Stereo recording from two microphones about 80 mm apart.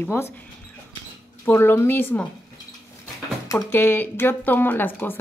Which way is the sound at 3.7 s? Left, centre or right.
Left.